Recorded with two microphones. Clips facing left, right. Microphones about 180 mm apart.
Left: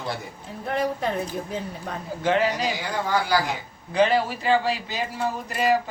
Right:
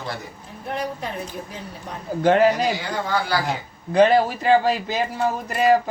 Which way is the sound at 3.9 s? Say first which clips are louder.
Right 5 dB; 45° right (ahead or behind).